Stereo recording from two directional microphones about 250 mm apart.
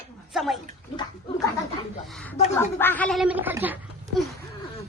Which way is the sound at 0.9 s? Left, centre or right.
Centre.